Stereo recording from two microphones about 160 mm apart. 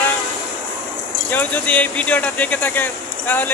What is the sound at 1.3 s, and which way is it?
Speech, 10° left (ahead or behind).